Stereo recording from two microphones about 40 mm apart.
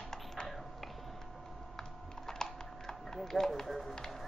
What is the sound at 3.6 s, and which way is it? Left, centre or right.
Speech, centre.